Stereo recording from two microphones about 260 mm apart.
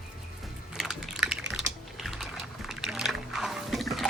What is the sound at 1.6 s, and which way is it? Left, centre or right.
Typing, centre.